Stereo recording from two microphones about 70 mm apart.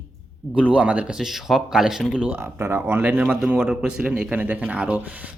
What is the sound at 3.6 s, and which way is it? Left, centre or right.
Speech, centre.